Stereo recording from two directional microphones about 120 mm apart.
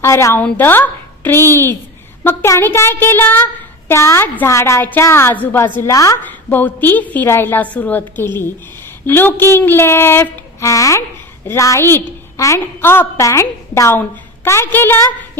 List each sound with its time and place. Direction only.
0.0 s a woman's voice: 25° left (ahead or behind)
5.8 s speech: 25° left (ahead or behind)
6.2 s a woman's voice: 15° left (ahead or behind)